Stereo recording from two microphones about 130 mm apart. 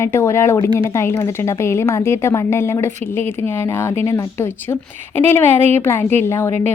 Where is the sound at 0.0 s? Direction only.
20° left (ahead or behind).